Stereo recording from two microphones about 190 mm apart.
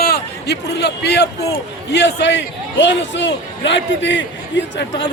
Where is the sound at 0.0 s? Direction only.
55° left (ahead or behind).